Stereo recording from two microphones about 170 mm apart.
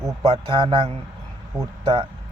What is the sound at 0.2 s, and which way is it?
Speech, 30° right (ahead or behind).